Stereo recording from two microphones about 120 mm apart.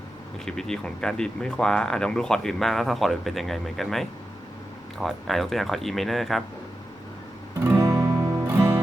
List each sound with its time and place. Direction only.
0.4 s speech: 5° left (ahead or behind)
7.6 s music: 20° right (ahead or behind)